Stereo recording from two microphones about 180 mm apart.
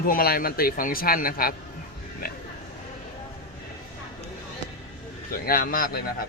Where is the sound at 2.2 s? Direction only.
55° left (ahead or behind).